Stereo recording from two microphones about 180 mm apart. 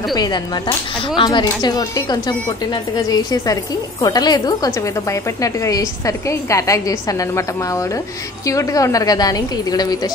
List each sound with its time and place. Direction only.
0.1 s a woman's voice: 25° left (ahead or behind)